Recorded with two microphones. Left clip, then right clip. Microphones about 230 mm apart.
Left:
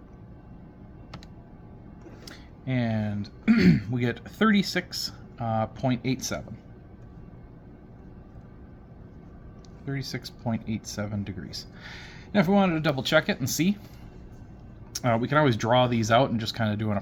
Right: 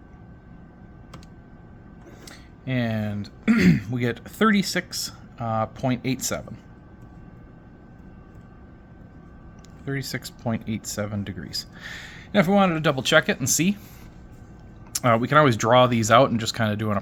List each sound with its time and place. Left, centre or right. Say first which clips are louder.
2.6 s speech: right 2 dB; centre
9.8 s speech: right 4 dB; right
14.9 s speech: right 6 dB; right